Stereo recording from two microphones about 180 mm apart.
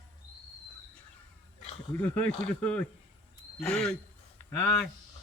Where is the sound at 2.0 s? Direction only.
10° left (ahead or behind).